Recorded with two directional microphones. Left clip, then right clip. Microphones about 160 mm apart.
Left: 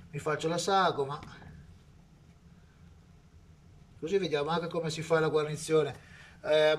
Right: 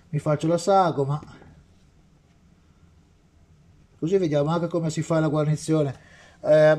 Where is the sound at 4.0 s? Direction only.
45° right (ahead or behind).